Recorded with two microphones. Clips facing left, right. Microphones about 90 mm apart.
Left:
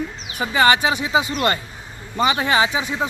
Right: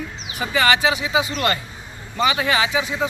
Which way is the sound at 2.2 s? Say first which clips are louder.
Left 2 dB; 25° left (ahead or behind).